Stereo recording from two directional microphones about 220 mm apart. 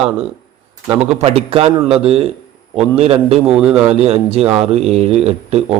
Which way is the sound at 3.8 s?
25° right (ahead or behind).